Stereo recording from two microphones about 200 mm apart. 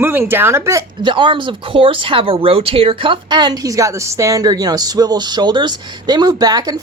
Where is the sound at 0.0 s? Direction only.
10° right (ahead or behind).